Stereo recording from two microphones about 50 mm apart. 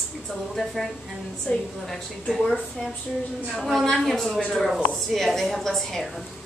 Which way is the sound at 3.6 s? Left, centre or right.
Centre.